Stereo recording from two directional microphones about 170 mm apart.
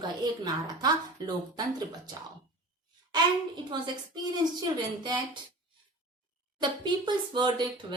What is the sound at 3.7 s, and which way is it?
Speech, 25° right (ahead or behind).